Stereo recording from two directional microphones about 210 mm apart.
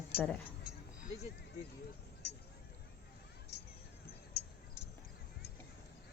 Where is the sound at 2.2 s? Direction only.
50° left (ahead or behind).